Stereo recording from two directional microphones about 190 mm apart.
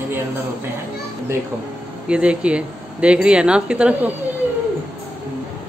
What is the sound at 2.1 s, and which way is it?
Speech, 5° right (ahead or behind).